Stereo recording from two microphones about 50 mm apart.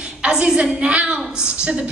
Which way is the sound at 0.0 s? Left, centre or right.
Centre.